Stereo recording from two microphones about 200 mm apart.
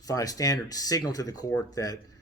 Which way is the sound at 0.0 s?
15° left (ahead or behind).